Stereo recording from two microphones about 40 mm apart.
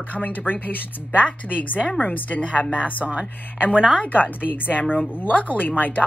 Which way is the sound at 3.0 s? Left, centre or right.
Right.